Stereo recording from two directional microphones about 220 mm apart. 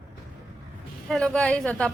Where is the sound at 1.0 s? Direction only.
Centre (ahead or behind).